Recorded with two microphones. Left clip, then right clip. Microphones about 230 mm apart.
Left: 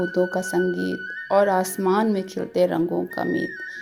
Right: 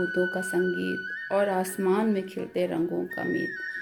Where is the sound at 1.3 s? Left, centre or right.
Centre.